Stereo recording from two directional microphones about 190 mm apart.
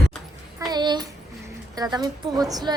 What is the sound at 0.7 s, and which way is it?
A woman's voice, 20° right (ahead or behind).